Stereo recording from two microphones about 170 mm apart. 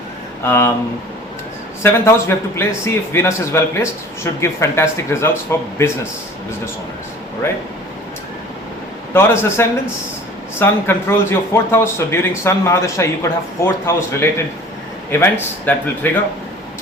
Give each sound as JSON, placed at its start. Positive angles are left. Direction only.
{"t": 0.4, "sound": "a man's voice", "side_deg": 15}
{"t": 1.8, "sound": "a man's voice", "side_deg": 15}
{"t": 9.1, "sound": "a man's voice", "side_deg": 15}